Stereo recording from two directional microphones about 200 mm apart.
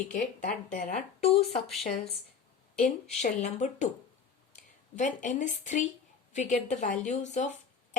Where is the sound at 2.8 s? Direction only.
35° left (ahead or behind).